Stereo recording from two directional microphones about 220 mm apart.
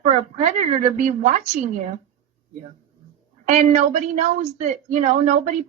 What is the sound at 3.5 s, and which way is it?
Speech, 30° right (ahead or behind).